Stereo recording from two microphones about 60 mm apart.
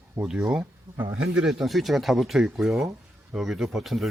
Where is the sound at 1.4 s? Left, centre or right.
Centre.